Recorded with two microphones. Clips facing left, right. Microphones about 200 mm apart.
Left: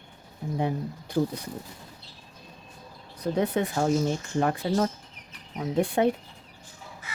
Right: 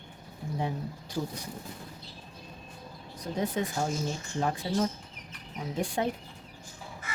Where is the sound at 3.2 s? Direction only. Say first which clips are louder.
Left 5 dB; 65° left (ahead or behind).